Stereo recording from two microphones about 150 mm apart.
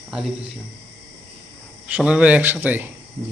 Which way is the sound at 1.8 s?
5° right (ahead or behind).